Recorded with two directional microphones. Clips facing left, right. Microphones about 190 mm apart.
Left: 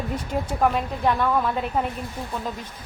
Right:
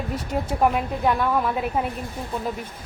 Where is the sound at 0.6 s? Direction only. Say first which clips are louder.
Right 1 dB; 10° right (ahead or behind).